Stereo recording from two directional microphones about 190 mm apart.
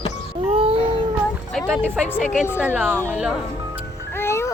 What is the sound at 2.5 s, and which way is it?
Speech, 5° right (ahead or behind).